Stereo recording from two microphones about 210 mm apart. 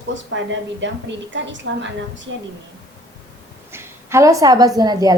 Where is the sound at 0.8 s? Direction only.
60° right (ahead or behind).